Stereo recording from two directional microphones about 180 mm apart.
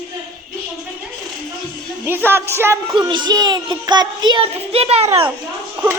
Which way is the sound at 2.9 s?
25° right (ahead or behind).